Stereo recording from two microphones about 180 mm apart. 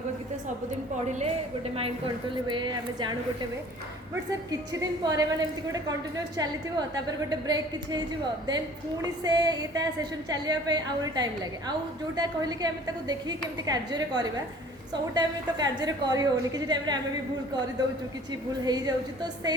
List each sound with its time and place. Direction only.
2.5 s a woman's voice: 25° right (ahead or behind)
18.6 s a woman's voice: 20° right (ahead or behind)